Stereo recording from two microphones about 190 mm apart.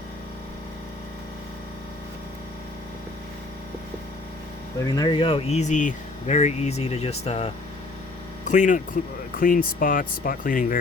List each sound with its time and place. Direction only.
4.8 s speech: 20° left (ahead or behind); by 10.8 s 45° left (ahead or behind)